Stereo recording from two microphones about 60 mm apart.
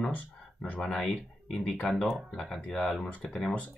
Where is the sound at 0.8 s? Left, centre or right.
Centre.